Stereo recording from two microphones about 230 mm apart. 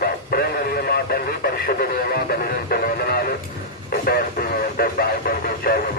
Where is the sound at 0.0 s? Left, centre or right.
Left.